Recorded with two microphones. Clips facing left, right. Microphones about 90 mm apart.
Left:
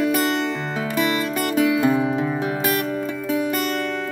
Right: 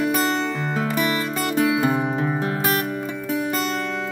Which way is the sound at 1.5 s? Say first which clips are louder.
Left 2 dB; 25° right (ahead or behind).